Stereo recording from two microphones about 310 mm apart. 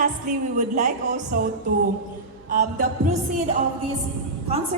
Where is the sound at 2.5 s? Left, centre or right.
Right.